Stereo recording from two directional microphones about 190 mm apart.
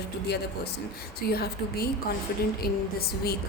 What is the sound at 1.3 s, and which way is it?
A woman's voice, 55° left (ahead or behind).